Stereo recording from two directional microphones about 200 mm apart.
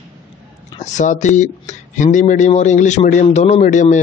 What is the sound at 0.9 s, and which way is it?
Speech, 35° left (ahead or behind).